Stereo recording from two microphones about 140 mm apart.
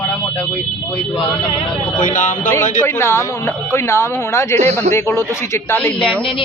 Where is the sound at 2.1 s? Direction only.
60° left (ahead or behind).